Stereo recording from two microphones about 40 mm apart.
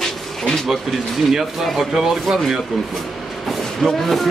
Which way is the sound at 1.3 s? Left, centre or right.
Centre.